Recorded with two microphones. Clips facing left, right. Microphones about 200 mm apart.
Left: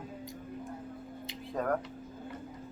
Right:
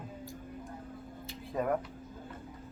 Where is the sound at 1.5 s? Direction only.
5° right (ahead or behind).